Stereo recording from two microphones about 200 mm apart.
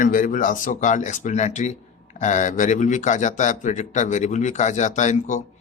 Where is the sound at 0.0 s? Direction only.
40° left (ahead or behind).